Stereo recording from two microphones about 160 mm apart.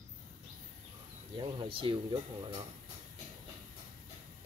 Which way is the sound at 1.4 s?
35° right (ahead or behind).